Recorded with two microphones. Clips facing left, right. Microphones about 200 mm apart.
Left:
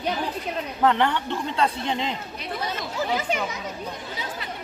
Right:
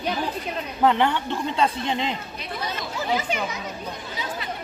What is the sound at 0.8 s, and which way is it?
Speech, 10° right (ahead or behind).